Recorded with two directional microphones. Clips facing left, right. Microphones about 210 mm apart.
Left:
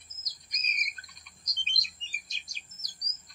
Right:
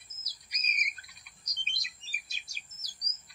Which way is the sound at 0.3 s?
10° right (ahead or behind).